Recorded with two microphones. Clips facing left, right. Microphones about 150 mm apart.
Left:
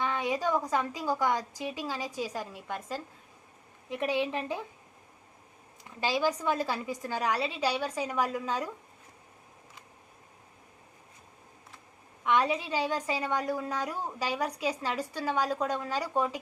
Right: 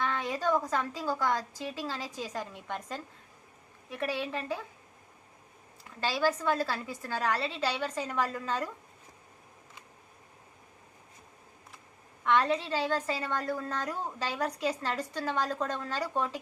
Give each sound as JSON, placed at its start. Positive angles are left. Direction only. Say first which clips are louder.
{"t": 0.0, "sound": "a woman's voice", "louder": "left 1 dB", "side_deg": 15}
{"t": 3.8, "sound": "a woman's voice", "louder": "left 4 dB", "side_deg": 20}
{"t": 6.0, "sound": "a woman's voice", "louder": "left 1 dB", "side_deg": 15}
{"t": 12.2, "sound": "a woman's voice", "louder": "even", "side_deg": 15}